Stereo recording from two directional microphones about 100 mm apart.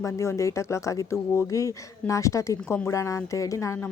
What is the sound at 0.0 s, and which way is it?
Speech, 30° left (ahead or behind).